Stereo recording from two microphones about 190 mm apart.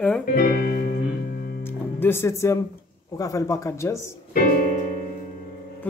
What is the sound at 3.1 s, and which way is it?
Speech, 15° left (ahead or behind).